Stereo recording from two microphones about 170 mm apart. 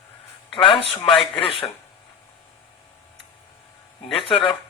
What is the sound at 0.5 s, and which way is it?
A man's voice, 35° left (ahead or behind).